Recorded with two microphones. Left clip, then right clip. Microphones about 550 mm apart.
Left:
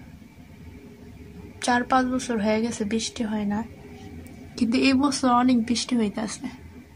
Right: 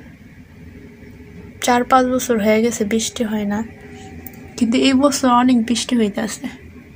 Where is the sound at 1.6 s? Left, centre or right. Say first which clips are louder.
Right 8 dB; left.